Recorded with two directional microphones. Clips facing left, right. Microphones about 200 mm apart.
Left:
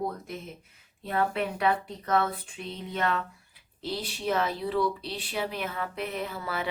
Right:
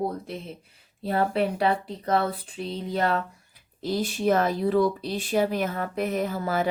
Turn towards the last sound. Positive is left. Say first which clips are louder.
# right 7 dB
turn(degrees=-45)  # may be behind; listen again after turning